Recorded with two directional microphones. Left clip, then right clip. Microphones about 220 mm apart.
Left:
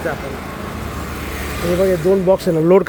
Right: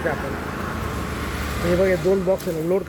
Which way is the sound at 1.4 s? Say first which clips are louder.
Left 3 dB; 50° left (ahead or behind).